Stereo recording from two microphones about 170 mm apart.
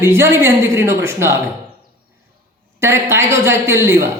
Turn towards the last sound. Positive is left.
turn(degrees=-15)  # may be behind; listen again after turning